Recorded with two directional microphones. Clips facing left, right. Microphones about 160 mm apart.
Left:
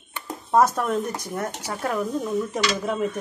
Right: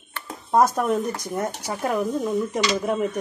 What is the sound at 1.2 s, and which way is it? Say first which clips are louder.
Speech: right 2 dB; 15° right (ahead or behind).